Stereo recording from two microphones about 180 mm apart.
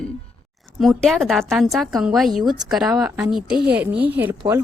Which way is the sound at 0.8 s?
Centre (ahead or behind).